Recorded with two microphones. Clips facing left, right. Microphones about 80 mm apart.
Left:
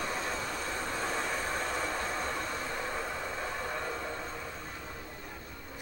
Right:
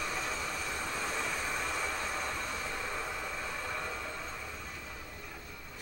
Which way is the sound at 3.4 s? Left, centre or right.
Left.